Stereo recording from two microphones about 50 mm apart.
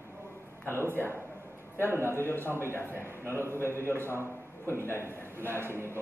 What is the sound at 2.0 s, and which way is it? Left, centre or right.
Speech, left.